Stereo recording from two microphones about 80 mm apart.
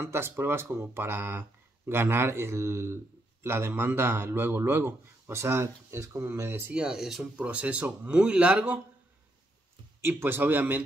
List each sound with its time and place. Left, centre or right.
0.0 s a man's voice: right
6.7 s speech: centre
7.4 s speech: centre
10.0 s a man's voice: right